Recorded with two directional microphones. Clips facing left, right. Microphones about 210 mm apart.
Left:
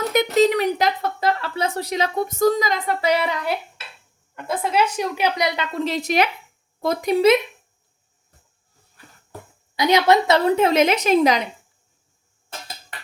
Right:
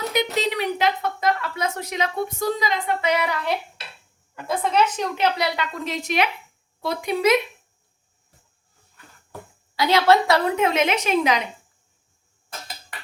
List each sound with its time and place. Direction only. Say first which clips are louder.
0.1 s speech: left 9 dB; 45° left (ahead or behind)
4.4 s a woman's voice: even; 5° left (ahead or behind)
5.7 s speech: left 4 dB; 30° left (ahead or behind)
9.7 s speech: left 1 dB; 15° left (ahead or behind); by 11.4 s 40° left (ahead or behind)